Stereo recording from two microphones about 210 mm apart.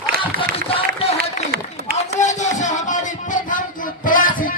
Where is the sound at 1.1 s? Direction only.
50° right (ahead or behind).